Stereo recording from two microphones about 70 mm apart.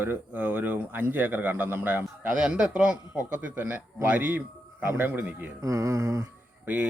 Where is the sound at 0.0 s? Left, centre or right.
Right.